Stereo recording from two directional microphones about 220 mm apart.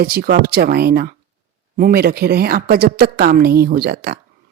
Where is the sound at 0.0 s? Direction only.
45° right (ahead or behind).